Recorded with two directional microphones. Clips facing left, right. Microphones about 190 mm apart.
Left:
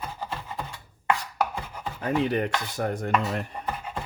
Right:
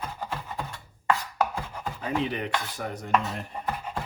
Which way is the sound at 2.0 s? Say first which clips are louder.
Left 5 dB; 50° left (ahead or behind).